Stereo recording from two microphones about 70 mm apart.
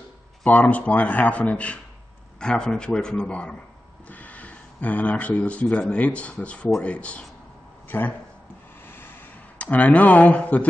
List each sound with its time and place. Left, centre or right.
0.5 s speech: left
7.9 s speech: left
9.6 s speech: left